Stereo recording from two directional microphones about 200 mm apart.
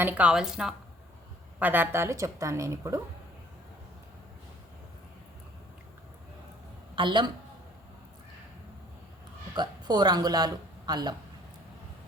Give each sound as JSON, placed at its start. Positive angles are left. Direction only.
{"t": 0.0, "sound": "a woman's voice", "side_deg": -5}
{"t": 6.9, "sound": "a man's voice", "side_deg": -25}
{"t": 9.6, "sound": "speech", "side_deg": -20}